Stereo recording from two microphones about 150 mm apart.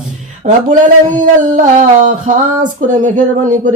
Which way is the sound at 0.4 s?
60° right (ahead or behind).